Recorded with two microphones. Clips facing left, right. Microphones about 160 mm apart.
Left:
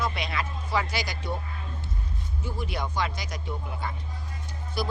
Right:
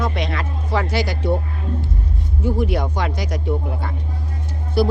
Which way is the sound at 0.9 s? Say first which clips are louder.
Right 10 dB; 15° left (ahead or behind).